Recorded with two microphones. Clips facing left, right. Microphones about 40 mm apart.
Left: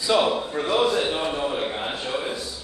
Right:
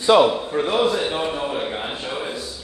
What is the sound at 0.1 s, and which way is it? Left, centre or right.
Speech, right.